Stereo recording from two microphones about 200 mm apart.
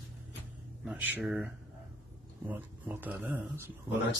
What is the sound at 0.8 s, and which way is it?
Speech, 10° right (ahead or behind).